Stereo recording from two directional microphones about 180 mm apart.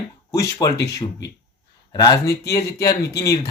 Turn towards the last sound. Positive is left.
turn(degrees=20)  # may be behind; listen again after turning